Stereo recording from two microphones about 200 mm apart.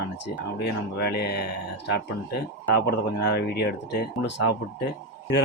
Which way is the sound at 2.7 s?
55° left (ahead or behind).